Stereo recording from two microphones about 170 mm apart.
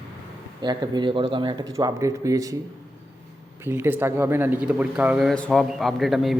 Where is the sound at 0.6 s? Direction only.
25° right (ahead or behind).